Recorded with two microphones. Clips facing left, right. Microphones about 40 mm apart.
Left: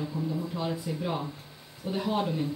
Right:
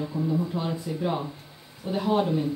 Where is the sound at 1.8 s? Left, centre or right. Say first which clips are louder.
Right 3 dB; right.